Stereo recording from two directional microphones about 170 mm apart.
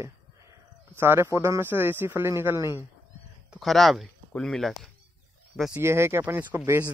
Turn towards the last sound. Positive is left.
turn(degrees=-15)  # may be behind; listen again after turning